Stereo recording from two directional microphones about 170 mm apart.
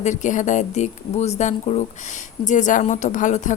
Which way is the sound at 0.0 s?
45° left (ahead or behind).